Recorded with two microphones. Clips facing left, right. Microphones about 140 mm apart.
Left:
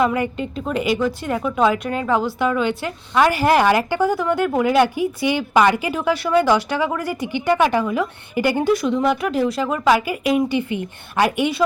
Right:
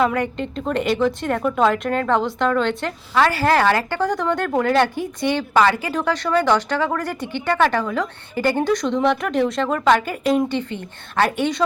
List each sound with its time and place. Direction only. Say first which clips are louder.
0.0 s a woman's voice: left 1 dB; 5° left (ahead or behind)